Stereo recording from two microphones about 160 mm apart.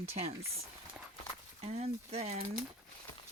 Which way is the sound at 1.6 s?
40° right (ahead or behind).